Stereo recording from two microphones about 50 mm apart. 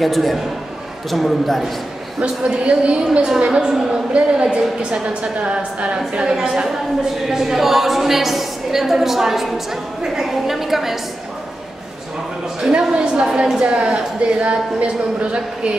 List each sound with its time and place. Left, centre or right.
0.0 s a woman's voice: centre
2.1 s a woman's voice: centre
12.7 s a woman's voice: centre